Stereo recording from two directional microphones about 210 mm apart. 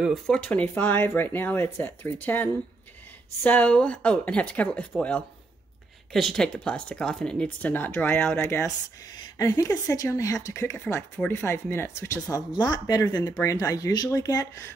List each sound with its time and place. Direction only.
0.0 s speech: centre (ahead or behind)